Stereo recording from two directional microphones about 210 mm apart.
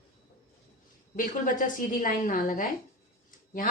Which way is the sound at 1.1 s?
40° left (ahead or behind).